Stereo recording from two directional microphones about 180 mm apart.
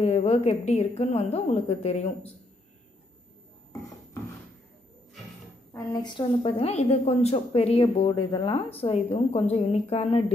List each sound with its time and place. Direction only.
0.0 s a woman's voice: 35° left (ahead or behind)
5.7 s a woman's voice: 20° left (ahead or behind)